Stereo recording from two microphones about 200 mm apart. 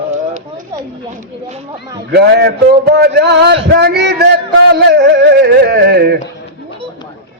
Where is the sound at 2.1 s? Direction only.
50° right (ahead or behind).